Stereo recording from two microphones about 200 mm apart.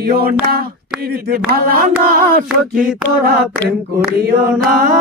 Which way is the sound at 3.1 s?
50° right (ahead or behind).